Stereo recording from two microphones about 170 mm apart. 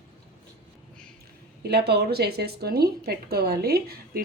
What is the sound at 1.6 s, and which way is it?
A woman's voice, 70° right (ahead or behind).